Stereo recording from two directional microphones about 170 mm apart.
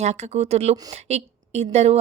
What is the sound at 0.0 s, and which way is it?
Speech, 40° right (ahead or behind).